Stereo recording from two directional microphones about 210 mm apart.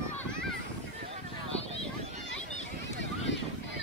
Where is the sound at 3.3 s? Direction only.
60° left (ahead or behind).